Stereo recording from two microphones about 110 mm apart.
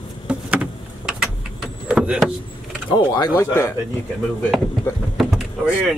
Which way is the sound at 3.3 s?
25° left (ahead or behind).